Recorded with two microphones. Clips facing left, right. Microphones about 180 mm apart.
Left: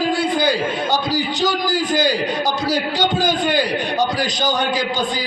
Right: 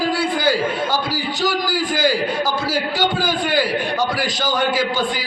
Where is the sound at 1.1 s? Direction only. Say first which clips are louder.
Left 2 dB; 20° left (ahead or behind).